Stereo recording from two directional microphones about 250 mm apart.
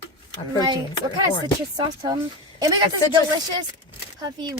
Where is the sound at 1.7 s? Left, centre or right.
Centre.